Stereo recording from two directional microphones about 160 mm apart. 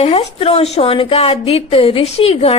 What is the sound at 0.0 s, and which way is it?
A woman's voice, 40° left (ahead or behind).